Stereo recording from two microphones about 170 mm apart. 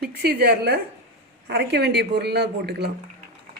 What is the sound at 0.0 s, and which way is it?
Speech, 70° right (ahead or behind).